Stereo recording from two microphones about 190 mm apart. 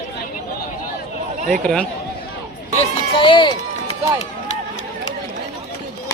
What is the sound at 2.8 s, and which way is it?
Speech, 25° left (ahead or behind).